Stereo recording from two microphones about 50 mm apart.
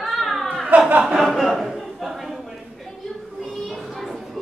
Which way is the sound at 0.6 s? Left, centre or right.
Right.